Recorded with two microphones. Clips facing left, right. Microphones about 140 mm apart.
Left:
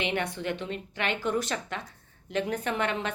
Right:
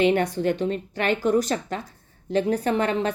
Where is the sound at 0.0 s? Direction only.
40° right (ahead or behind).